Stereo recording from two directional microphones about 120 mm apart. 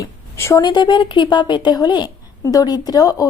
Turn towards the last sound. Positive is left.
turn(degrees=30)  # may be behind; listen again after turning